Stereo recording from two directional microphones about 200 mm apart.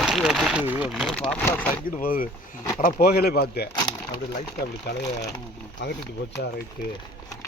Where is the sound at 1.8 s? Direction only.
45° left (ahead or behind).